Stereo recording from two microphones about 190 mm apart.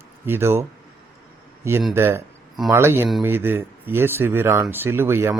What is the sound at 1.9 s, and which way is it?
Speech, 15° right (ahead or behind).